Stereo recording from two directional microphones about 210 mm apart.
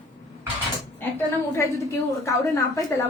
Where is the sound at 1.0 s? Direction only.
10° left (ahead or behind).